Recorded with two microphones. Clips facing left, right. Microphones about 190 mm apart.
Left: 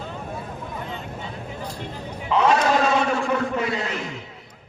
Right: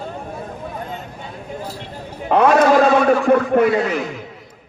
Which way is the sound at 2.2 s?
55° right (ahead or behind).